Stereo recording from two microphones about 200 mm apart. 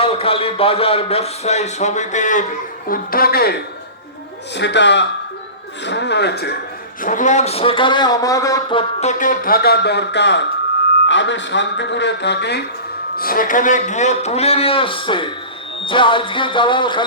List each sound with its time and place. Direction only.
0.0 s a man's voice: 30° left (ahead or behind); by 3.5 s 50° left (ahead or behind)
4.5 s speech: 60° left (ahead or behind)
7.0 s a man's voice: 40° left (ahead or behind); by 8.8 s 15° left (ahead or behind)
9.0 s speech: 40° left (ahead or behind); by 12.6 s 55° left (ahead or behind)
13.1 s a man's voice: 45° left (ahead or behind); by 17.1 s 25° left (ahead or behind)